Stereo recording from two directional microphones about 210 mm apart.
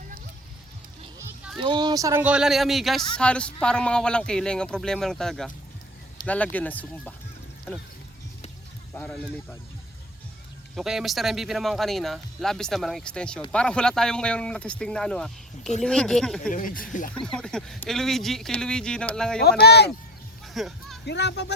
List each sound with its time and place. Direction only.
1.6 s speech: 20° right (ahead or behind); by 7.1 s 5° left (ahead or behind)
9.0 s speech: centre (ahead or behind)
10.8 s speech: centre (ahead or behind)
16.5 s speech: 40° left (ahead or behind)
17.2 s speech: 5° left (ahead or behind)
19.6 s speech: 50° left (ahead or behind)
20.5 s music: centre (ahead or behind)
21.0 s speech: 55° left (ahead or behind)